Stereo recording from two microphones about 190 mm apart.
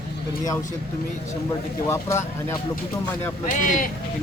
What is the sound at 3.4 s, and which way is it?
Speech, 45° left (ahead or behind).